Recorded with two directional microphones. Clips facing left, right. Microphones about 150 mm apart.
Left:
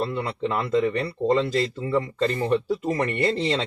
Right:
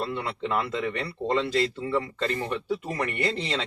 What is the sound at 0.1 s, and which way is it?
Speech, 35° left (ahead or behind).